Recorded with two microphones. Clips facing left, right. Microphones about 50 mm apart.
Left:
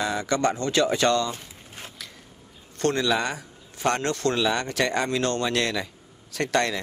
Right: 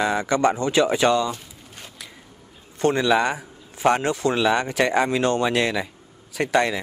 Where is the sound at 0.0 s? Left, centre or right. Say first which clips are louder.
Right 4 dB; right.